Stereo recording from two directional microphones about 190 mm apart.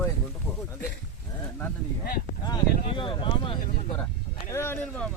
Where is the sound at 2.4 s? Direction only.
25° left (ahead or behind).